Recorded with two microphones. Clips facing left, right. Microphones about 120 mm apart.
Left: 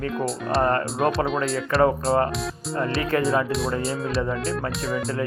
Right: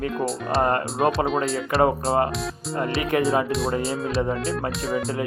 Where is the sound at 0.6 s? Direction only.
20° right (ahead or behind).